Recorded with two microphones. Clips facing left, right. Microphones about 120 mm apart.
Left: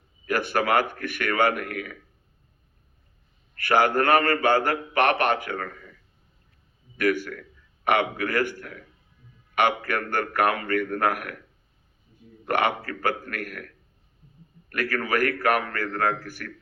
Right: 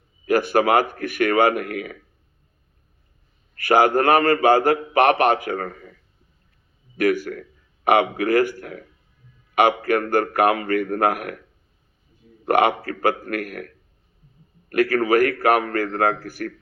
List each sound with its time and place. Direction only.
0.3 s a man's voice: 40° right (ahead or behind)
3.6 s a man's voice: 40° right (ahead or behind)
12.5 s a man's voice: 40° right (ahead or behind)
14.8 s a man's voice: 40° right (ahead or behind)